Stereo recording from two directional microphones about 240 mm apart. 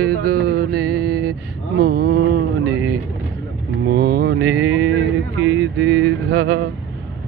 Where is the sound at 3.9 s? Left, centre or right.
Right.